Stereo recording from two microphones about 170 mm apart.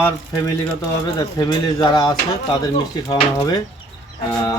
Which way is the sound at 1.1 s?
25° left (ahead or behind).